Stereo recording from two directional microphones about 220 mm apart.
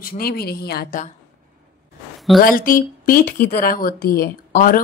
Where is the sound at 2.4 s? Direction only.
40° left (ahead or behind).